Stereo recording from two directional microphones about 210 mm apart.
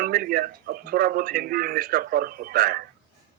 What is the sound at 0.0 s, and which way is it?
Speech, 45° right (ahead or behind).